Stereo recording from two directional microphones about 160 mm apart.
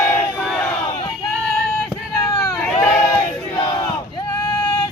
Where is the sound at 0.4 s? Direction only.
Centre (ahead or behind).